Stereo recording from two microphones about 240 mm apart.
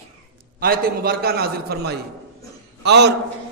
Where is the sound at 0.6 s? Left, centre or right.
Right.